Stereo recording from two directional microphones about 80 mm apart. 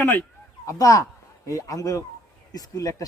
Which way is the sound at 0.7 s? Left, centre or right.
Left.